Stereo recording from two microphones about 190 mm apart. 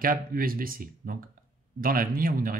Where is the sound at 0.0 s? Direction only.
50° right (ahead or behind).